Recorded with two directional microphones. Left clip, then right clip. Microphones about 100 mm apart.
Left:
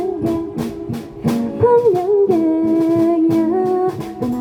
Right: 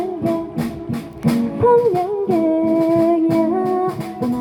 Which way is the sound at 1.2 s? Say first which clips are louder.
Left 1 dB; 45° left (ahead or behind).